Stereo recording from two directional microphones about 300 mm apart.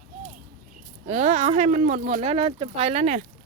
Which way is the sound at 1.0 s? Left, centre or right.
Right.